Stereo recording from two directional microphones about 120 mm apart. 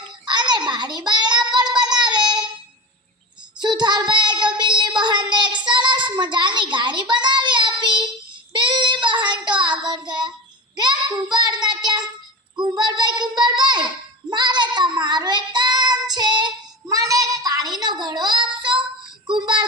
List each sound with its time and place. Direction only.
0.3 s child singing: 40° right (ahead or behind)
1.5 s a sound: 35° right (ahead or behind)
3.6 s child singing: 40° right (ahead or behind)
19.3 s synthetic singing: 40° right (ahead or behind)